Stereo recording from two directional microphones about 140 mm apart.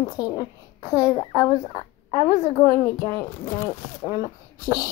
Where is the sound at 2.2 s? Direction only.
60° left (ahead or behind).